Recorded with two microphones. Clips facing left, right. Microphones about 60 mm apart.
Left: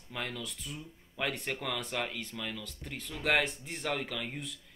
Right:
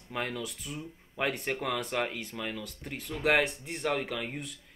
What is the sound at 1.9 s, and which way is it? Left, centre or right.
Speech, centre.